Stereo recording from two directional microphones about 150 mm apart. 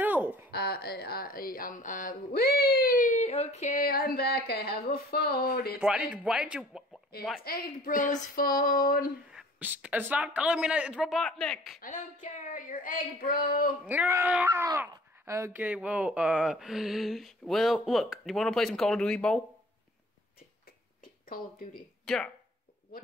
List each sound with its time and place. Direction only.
0.0 s a sound: 10° right (ahead or behind)
0.5 s speech: 90° left; by 3.8 s 50° left (ahead or behind)
3.8 s a sound: 80° left
4.5 s speech: 90° left
5.8 s a man's voice: 5° right (ahead or behind)
7.1 s speech: 90° left; by 9.1 s 70° left (ahead or behind)
9.3 s speech: 5° right (ahead or behind)
11.8 s child singing: 60° left (ahead or behind); by 13.7 s 80° left
13.8 s speech: 15° right (ahead or behind); by 19.4 s 5° left (ahead or behind)
22.0 s speech: centre (ahead or behind)